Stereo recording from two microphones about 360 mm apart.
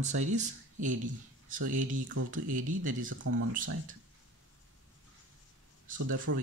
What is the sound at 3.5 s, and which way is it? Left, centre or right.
Speech, right.